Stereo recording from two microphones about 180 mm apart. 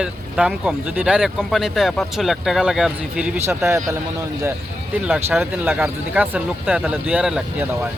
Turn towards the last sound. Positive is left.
turn(degrees=-5)  # may be behind; listen again after turning